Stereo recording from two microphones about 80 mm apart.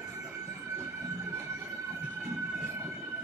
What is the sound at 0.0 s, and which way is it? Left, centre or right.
Train, right.